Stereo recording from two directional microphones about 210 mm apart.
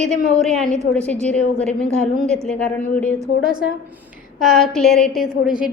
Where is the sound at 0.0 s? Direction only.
Centre (ahead or behind).